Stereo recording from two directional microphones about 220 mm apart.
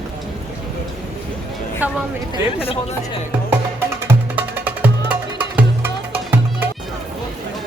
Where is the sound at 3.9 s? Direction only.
10° right (ahead or behind).